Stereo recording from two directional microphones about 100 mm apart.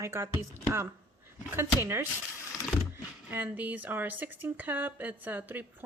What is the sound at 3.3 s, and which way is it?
Speech, 20° right (ahead or behind).